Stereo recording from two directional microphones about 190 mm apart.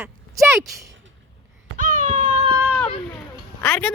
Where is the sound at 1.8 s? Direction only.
40° right (ahead or behind).